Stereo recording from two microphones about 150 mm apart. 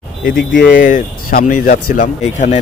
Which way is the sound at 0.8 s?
65° left (ahead or behind).